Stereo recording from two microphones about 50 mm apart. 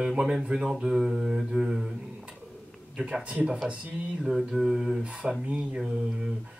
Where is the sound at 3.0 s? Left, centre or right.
Centre.